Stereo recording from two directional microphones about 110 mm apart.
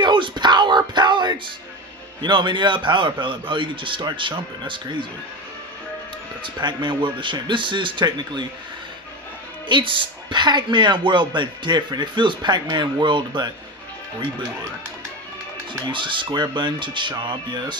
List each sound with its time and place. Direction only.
0.0 s a sound: 45° right (ahead or behind)
2.2 s speech: 45° right (ahead or behind)
6.4 s speech: 45° right (ahead or behind)
9.7 s speech: 45° right (ahead or behind)
15.9 s speech: 50° right (ahead or behind)